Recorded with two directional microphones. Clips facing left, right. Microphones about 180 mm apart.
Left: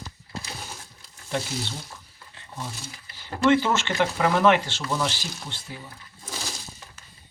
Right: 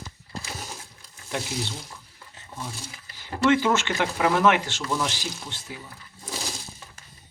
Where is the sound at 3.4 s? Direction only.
10° right (ahead or behind).